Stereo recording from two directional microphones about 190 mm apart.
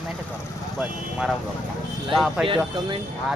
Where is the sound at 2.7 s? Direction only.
25° right (ahead or behind).